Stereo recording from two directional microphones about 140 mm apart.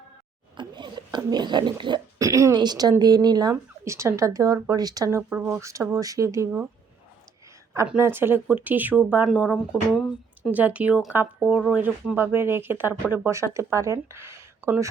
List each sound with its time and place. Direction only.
0.5 s speech: 35° right (ahead or behind); by 6.7 s 15° right (ahead or behind)
7.9 s speech: 15° right (ahead or behind)